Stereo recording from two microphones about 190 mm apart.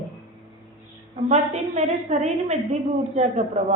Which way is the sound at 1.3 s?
35° right (ahead or behind).